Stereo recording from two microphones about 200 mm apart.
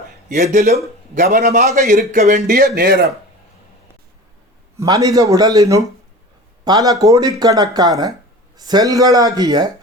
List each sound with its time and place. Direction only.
0.5 s a man's voice: 40° right (ahead or behind)
4.8 s speech: 15° right (ahead or behind)